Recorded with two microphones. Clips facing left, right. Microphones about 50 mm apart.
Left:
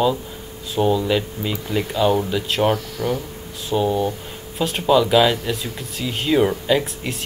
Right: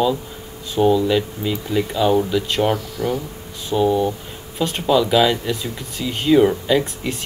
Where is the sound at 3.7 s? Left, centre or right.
Centre.